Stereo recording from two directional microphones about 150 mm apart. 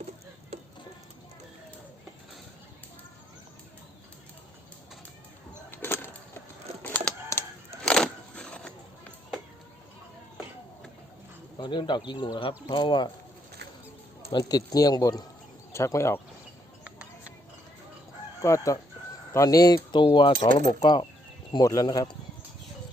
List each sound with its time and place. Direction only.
5.7 s a sound: 15° left (ahead or behind)
11.6 s speech: 30° left (ahead or behind)
14.3 s speech: 25° left (ahead or behind)
18.4 s speech: 20° left (ahead or behind)